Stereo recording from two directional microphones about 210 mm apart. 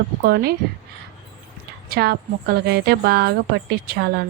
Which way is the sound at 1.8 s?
50° right (ahead or behind).